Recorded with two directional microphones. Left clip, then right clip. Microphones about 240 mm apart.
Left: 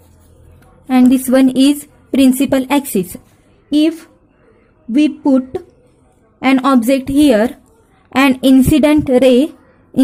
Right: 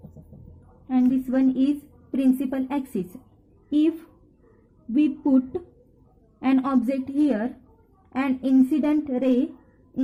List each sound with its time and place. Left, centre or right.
0.9 s a woman's voice: left